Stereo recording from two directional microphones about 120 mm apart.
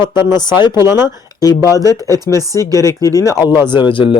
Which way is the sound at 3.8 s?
45° left (ahead or behind).